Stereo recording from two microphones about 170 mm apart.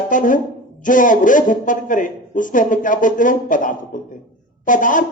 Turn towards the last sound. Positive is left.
turn(degrees=50)  # may be behind; listen again after turning